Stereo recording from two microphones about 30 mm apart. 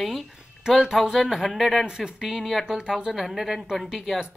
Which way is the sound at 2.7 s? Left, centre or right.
Right.